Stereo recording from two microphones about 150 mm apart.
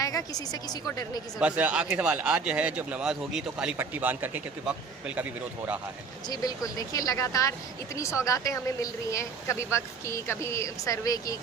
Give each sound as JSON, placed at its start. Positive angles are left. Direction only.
{"t": 0.0, "sound": "speech", "side_deg": 25}
{"t": 1.4, "sound": "speech", "side_deg": -10}
{"t": 6.2, "sound": "speech", "side_deg": 25}